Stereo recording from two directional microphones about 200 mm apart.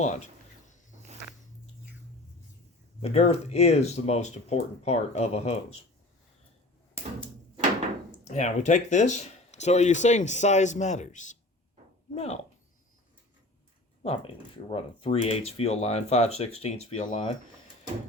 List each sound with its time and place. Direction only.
0.9 s walk: 35° right (ahead or behind)
3.0 s speech: 35° left (ahead or behind)
8.2 s speech: 35° left (ahead or behind)
14.0 s speech: 30° left (ahead or behind)